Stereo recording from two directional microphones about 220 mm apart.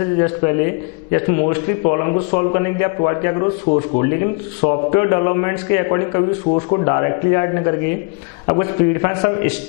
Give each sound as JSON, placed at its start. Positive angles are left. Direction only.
{"t": 0.0, "sound": "a man's voice", "side_deg": 15}
{"t": 3.6, "sound": "speech", "side_deg": 35}
{"t": 4.0, "sound": "a man's voice", "side_deg": 15}